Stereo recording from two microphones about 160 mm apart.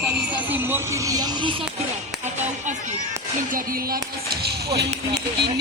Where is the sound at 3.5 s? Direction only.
65° right (ahead or behind).